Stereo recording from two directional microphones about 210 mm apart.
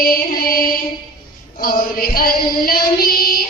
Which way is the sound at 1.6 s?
45° left (ahead or behind).